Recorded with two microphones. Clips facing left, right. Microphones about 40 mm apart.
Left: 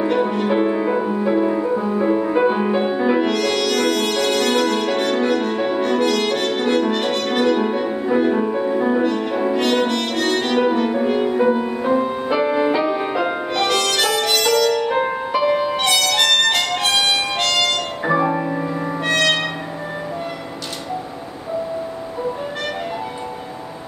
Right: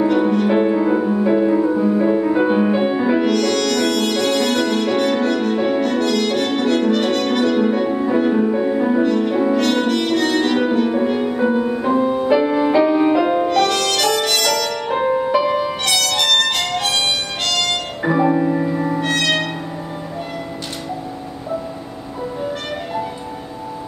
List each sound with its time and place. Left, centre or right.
0.0 s music: centre